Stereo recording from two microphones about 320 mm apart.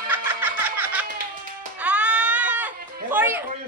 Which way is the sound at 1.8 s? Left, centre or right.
Centre.